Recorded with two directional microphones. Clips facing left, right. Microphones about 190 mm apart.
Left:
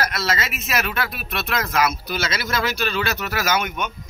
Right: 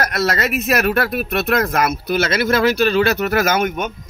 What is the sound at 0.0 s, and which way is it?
Speech, 45° right (ahead or behind).